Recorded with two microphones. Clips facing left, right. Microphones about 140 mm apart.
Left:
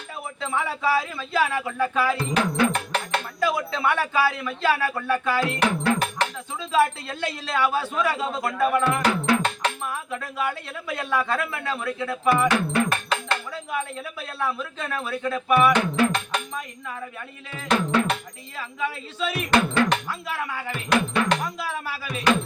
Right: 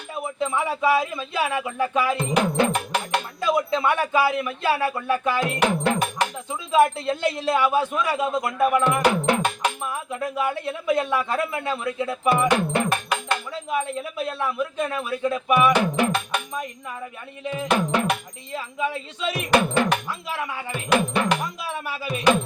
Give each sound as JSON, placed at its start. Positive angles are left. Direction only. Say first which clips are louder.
{"t": 0.3, "sound": "speech", "louder": "right 3 dB", "side_deg": -20}
{"t": 5.4, "sound": "music", "louder": "right 2 dB", "side_deg": -20}
{"t": 6.7, "sound": "a man's voice", "louder": "right 3 dB", "side_deg": -20}
{"t": 17.5, "sound": "speech", "louder": "even", "side_deg": -20}
{"t": 19.3, "sound": "speech", "louder": "right 2 dB", "side_deg": -20}